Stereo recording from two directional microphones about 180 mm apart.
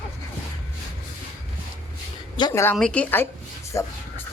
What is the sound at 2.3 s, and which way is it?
A woman's voice, 20° left (ahead or behind).